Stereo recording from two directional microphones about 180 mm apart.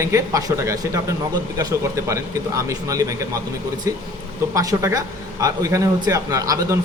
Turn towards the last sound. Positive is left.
turn(degrees=-20)  # may be behind; listen again after turning